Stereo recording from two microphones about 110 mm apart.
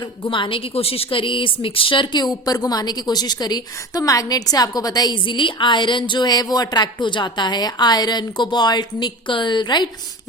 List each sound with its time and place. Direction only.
0.3 s a woman's voice: 50° left (ahead or behind)